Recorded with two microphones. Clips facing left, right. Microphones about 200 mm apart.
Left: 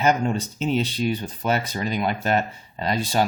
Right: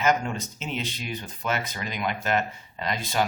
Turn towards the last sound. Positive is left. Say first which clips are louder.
# left 4 dB
turn(degrees=35)  # may be behind; listen again after turning